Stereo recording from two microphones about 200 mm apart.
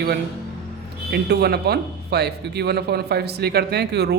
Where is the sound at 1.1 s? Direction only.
55° right (ahead or behind).